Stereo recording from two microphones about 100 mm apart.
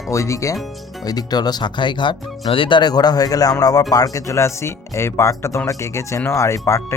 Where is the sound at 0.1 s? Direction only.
30° left (ahead or behind).